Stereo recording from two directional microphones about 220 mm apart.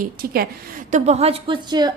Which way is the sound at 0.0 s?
40° right (ahead or behind).